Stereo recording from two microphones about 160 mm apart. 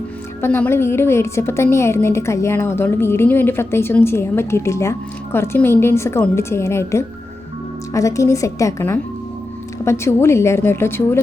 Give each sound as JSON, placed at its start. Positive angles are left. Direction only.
{"t": 0.4, "sound": "a woman's voice", "side_deg": 15}